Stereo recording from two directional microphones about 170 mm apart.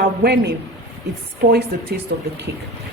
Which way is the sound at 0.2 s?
70° right (ahead or behind).